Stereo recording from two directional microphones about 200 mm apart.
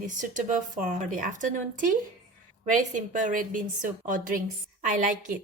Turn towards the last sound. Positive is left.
turn(degrees=-40)  # may be behind; listen again after turning